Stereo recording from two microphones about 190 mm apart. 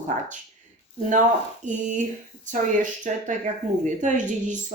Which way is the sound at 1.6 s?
40° right (ahead or behind).